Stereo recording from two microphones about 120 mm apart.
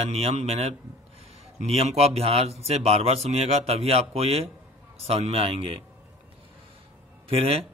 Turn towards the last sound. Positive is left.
turn(degrees=-50)  # may be behind; listen again after turning